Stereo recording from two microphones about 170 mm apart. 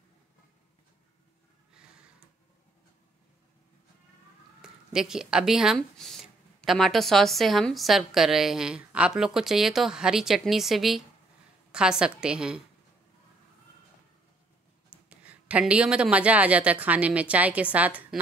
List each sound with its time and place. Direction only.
4.6 s speech: 5° right (ahead or behind)
15.0 s speech: 10° right (ahead or behind)